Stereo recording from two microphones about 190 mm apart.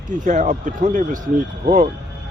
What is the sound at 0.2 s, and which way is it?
Speech, 40° right (ahead or behind).